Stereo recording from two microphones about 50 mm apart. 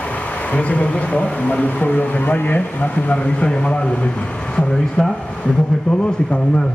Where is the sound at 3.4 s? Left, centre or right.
Centre.